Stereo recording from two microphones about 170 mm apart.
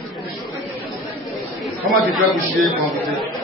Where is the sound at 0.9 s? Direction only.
Centre (ahead or behind).